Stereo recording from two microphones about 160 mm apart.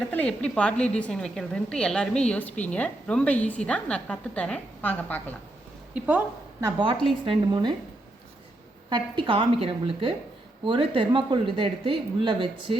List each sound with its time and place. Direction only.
0.1 s a woman's voice: 5° left (ahead or behind)
5.9 s a woman's voice: 10° right (ahead or behind)
6.7 s a woman's voice: 30° right (ahead or behind)
8.9 s speech: 30° right (ahead or behind)